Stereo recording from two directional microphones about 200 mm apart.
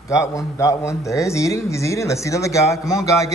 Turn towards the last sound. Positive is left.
turn(degrees=15)  # may be behind; listen again after turning